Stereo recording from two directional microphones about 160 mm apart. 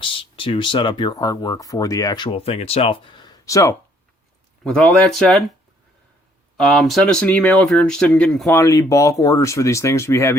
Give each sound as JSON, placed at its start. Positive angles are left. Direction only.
{"t": 0.0, "sound": "speech", "side_deg": 30}
{"t": 4.6, "sound": "speech", "side_deg": 5}
{"t": 6.6, "sound": "speech", "side_deg": 0}
{"t": 8.4, "sound": "speech", "side_deg": 15}